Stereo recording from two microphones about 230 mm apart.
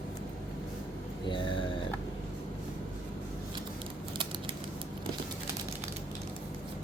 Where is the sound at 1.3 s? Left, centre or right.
Left.